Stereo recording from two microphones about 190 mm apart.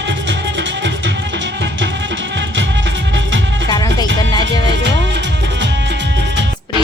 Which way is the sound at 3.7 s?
20° left (ahead or behind).